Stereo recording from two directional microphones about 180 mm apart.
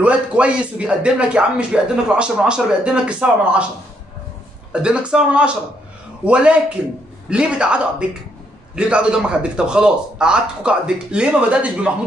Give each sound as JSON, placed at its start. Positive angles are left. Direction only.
{"t": 0.0, "sound": "speech", "side_deg": -5}
{"t": 4.7, "sound": "a man's voice", "side_deg": -5}